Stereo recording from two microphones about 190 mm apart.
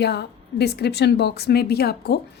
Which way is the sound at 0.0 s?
60° left (ahead or behind).